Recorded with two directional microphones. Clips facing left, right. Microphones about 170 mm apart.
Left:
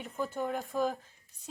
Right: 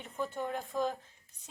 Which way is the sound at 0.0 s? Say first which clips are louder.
Left 2 dB; 5° left (ahead or behind).